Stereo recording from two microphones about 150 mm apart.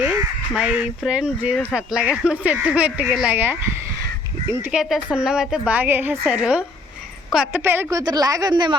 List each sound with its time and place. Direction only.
0.0 s speech: 5° right (ahead or behind)
4.6 s a woman's voice: 5° right (ahead or behind); by 8.7 s 30° right (ahead or behind)